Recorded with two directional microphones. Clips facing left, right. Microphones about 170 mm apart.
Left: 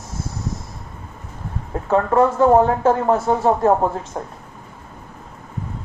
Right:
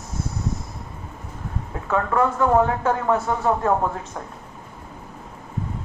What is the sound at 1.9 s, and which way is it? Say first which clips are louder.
Speech: left 5 dB; 30° left (ahead or behind).